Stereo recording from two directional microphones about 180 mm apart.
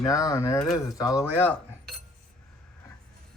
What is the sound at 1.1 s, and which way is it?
Speech, 10° left (ahead or behind).